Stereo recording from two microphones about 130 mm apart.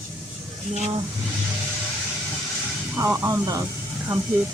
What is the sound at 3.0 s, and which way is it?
Speech, 25° right (ahead or behind).